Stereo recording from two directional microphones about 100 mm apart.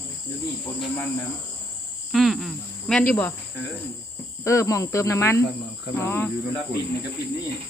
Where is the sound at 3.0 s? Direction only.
20° left (ahead or behind).